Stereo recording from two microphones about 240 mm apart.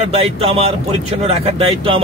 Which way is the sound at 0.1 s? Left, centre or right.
Right.